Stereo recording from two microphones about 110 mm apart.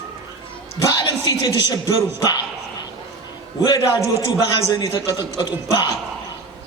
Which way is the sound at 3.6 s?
30° left (ahead or behind).